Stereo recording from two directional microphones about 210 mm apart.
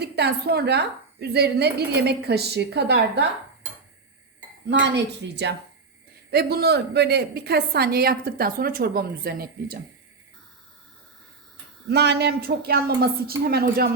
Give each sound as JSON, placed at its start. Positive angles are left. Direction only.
{"t": 0.0, "sound": "a woman's voice", "side_deg": -50}
{"t": 4.7, "sound": "a woman's voice", "side_deg": -55}
{"t": 11.9, "sound": "a woman's voice", "side_deg": -50}